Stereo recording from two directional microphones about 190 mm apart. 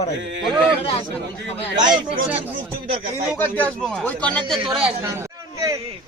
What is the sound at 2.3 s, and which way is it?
Speech, 10° right (ahead or behind).